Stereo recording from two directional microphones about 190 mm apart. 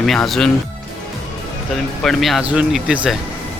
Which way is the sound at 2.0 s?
Centre (ahead or behind).